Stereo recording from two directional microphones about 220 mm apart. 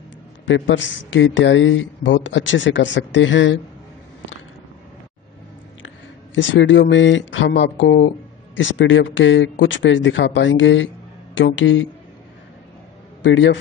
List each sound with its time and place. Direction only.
0.5 s speech: 60° left (ahead or behind)
6.3 s speech: 55° left (ahead or behind)
13.2 s speech: 55° left (ahead or behind)